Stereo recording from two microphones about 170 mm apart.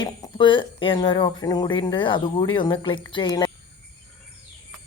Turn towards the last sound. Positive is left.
turn(degrees=25)  # may be behind; listen again after turning